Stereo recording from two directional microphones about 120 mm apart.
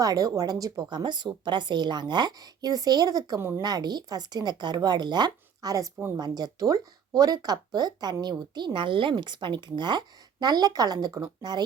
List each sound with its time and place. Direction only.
0.0 s speech: 30° right (ahead or behind)